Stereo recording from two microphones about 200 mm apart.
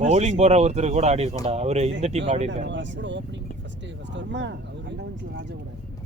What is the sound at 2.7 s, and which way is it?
Speech, 65° right (ahead or behind).